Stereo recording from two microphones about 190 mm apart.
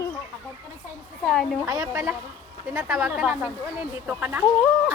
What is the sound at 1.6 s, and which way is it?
Speech, 15° right (ahead or behind).